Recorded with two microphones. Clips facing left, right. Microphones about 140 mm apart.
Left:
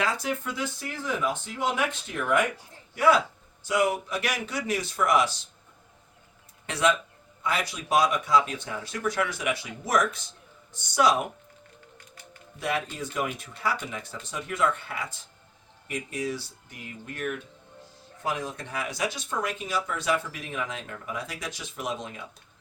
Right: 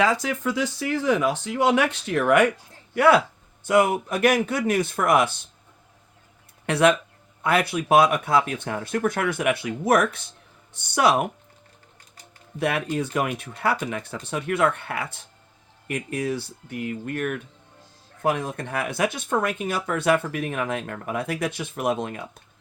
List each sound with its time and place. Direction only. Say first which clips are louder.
0.0 s speech: right 6 dB; 90° right; by 3.2 s 65° right (ahead or behind)
3.6 s speech: right 6 dB; 55° right (ahead or behind)
6.7 s speech: right 6 dB; 60° right (ahead or behind)
12.5 s speech: right 6 dB; 60° right (ahead or behind)